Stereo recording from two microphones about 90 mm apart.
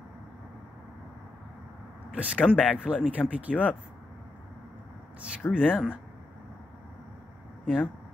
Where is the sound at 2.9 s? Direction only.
10° right (ahead or behind).